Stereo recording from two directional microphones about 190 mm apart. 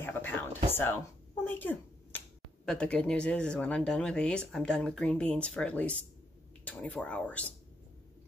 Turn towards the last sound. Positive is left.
turn(degrees=5)  # may be behind; listen again after turning